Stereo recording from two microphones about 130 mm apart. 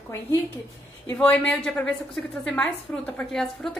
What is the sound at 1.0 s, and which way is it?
A woman's voice, 15° left (ahead or behind).